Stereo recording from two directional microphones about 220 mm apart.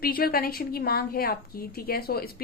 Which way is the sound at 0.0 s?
45° left (ahead or behind).